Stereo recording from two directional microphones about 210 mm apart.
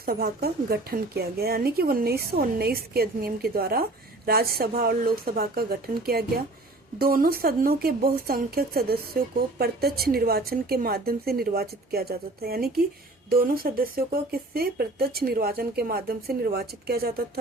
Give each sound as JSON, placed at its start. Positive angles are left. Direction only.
{"t": 0.0, "sound": "speech", "side_deg": -45}